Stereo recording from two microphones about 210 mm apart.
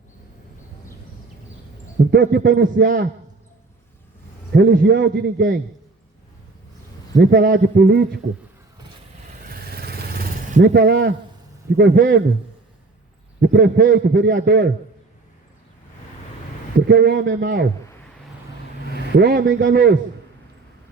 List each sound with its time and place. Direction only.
2.0 s a man's voice: 50° right (ahead or behind)
4.5 s a man's voice: 50° right (ahead or behind)
7.2 s a man's voice: 50° right (ahead or behind)
9.5 s vehicle: 45° right (ahead or behind)
10.6 s a man's voice: 50° right (ahead or behind)
13.4 s a man's voice: 50° right (ahead or behind)
16.9 s a man's voice: 50° right (ahead or behind)
19.1 s a man's voice: 50° right (ahead or behind)